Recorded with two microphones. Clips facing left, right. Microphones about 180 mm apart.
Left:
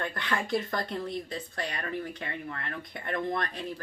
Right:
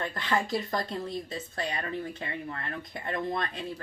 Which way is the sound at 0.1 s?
20° right (ahead or behind).